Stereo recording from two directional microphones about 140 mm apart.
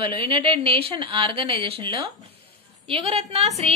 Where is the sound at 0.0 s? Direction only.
40° right (ahead or behind).